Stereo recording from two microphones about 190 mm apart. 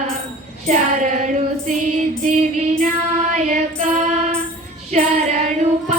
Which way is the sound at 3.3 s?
35° right (ahead or behind).